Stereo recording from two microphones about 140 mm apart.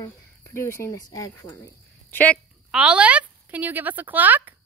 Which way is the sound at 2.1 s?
10° left (ahead or behind).